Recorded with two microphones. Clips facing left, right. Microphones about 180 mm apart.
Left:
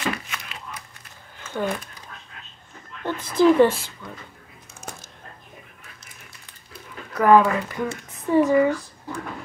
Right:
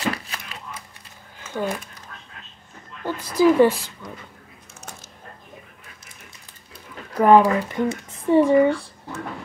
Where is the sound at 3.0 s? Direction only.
10° right (ahead or behind).